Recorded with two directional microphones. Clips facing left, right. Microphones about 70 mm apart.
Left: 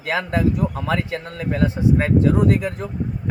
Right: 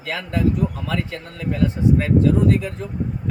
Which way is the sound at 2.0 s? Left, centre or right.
Left.